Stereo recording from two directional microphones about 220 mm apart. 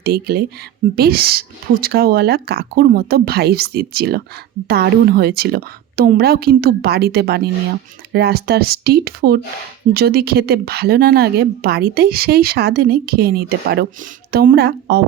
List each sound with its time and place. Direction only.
0.0 s a woman's voice: 45° right (ahead or behind)